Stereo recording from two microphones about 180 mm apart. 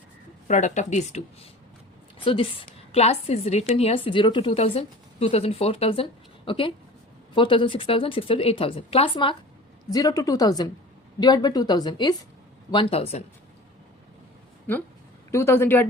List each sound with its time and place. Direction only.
0.4 s a woman's voice: 40° left (ahead or behind)
2.1 s a woman's voice: 30° left (ahead or behind)
15.3 s speech: 15° left (ahead or behind)